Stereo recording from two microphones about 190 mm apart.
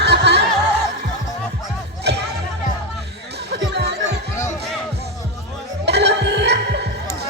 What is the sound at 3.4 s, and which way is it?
Music, 60° right (ahead or behind).